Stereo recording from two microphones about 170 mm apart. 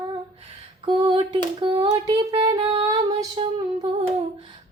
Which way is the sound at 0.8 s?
30° right (ahead or behind).